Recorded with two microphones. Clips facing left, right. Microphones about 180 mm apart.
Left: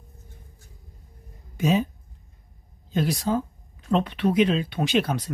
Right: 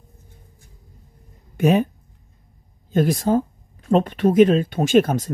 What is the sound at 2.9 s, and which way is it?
Speech, 50° right (ahead or behind).